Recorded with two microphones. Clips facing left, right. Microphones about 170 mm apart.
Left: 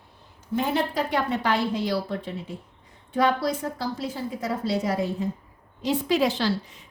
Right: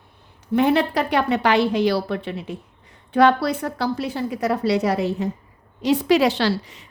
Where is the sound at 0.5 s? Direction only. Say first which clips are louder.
Right 7 dB; 70° right (ahead or behind).